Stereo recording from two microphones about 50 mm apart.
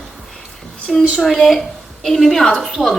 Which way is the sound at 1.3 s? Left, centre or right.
Centre.